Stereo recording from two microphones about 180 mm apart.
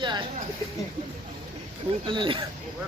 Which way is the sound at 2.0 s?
25° right (ahead or behind).